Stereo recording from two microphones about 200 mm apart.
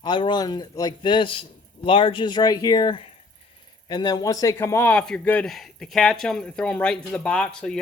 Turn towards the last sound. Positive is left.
turn(degrees=5)  # may be behind; listen again after turning